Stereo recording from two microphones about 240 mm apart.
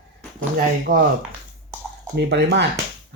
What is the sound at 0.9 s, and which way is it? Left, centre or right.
Speech, right.